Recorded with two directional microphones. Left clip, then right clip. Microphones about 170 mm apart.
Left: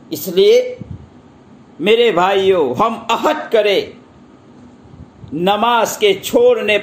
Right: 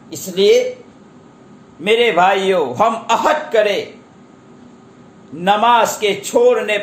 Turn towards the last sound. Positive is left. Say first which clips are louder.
# left 1 dB
turn(degrees=40)  # may be behind; listen again after turning